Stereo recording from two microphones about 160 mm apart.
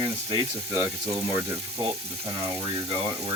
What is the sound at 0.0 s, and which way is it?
Speech, 30° right (ahead or behind).